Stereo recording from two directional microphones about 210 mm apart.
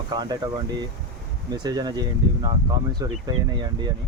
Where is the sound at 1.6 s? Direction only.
20° right (ahead or behind).